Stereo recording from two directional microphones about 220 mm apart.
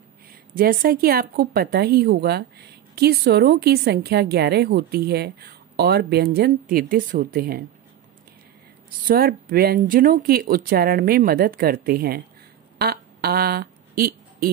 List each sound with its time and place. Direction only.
0.3 s a woman's voice: 40° right (ahead or behind)
9.0 s a woman's voice: 40° right (ahead or behind)
12.7 s a sound: 45° right (ahead or behind)